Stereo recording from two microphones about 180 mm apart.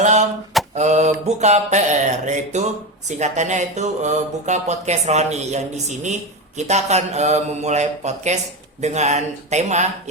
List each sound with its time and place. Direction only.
0.0 s mantra: 40° right (ahead or behind)
0.7 s speech: 40° right (ahead or behind)